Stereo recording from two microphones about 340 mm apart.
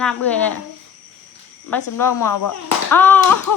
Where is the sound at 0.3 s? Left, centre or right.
Centre.